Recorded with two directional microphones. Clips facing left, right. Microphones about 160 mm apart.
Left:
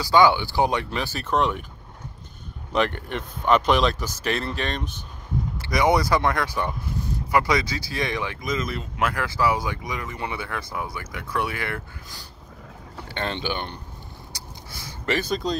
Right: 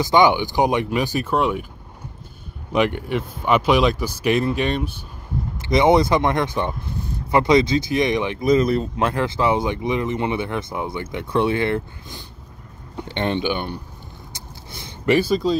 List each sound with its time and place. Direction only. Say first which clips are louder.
0.0 s speech: right 2 dB; 20° right (ahead or behind)
2.7 s speech: right 4 dB; 10° right (ahead or behind)
5.6 s speech: right 6 dB; 25° right (ahead or behind)
8.5 s speech: right 15 dB; 35° right (ahead or behind); by 13.7 s 10° right (ahead or behind)
14.3 s a sound: right 2 dB; 25° right (ahead or behind)
15.1 s speech: right 7 dB; 5° right (ahead or behind)